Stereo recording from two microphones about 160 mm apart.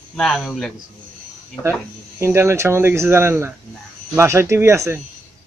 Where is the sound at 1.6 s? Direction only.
15° right (ahead or behind).